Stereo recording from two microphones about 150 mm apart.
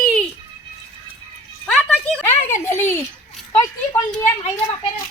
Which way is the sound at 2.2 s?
15° left (ahead or behind).